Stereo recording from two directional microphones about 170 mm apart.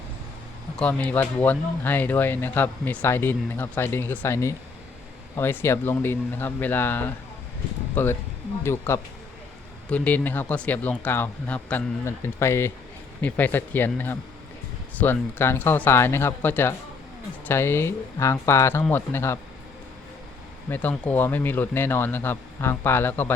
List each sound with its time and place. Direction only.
0.8 s speech: 10° left (ahead or behind)
20.7 s speech: 10° left (ahead or behind)